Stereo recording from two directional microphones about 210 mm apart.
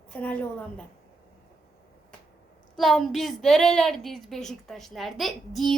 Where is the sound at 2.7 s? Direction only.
Centre (ahead or behind).